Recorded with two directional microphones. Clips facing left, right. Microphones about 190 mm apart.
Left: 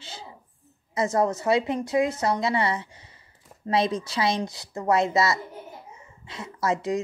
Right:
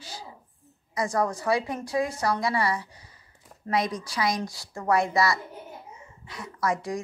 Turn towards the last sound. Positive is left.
turn(degrees=25)  # may be behind; listen again after turning